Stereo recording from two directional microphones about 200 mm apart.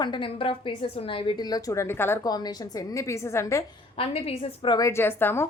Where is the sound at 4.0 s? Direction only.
30° left (ahead or behind); by 5.4 s 10° left (ahead or behind).